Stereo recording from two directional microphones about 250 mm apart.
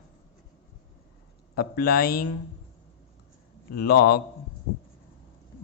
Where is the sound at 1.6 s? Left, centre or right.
Left.